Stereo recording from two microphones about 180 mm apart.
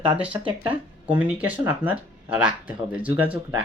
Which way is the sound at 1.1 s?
10° right (ahead or behind).